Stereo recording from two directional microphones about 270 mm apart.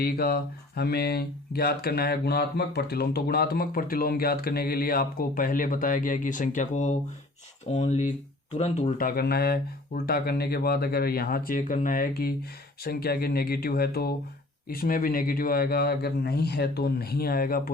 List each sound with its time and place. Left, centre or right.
0.0 s speech: left